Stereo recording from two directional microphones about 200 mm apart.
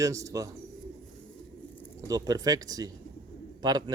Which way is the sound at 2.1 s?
20° right (ahead or behind).